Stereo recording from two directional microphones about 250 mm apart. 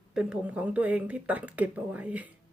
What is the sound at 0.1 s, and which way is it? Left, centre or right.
Speech, centre.